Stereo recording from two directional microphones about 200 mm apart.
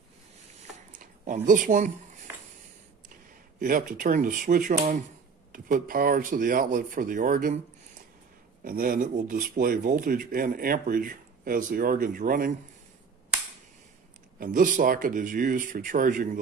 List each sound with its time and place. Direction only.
0.6 s a sound: 40° right (ahead or behind)
3.5 s speech: 45° right (ahead or behind)
8.6 s speech: 45° right (ahead or behind)
14.4 s speech: 40° right (ahead or behind)